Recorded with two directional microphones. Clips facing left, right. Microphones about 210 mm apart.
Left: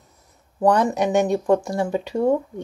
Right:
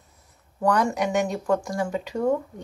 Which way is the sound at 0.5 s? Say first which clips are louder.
Left 4 dB; 25° left (ahead or behind).